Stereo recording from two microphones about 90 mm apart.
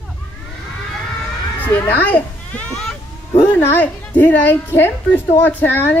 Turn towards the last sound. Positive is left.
turn(degrees=20)  # may be behind; listen again after turning